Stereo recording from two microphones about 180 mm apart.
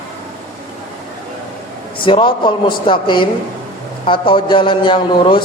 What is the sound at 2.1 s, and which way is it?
A man's voice, 25° left (ahead or behind).